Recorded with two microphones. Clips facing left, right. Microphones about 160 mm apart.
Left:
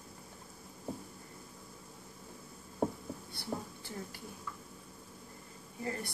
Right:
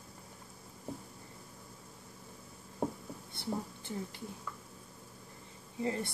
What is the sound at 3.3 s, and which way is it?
Speech, 20° right (ahead or behind).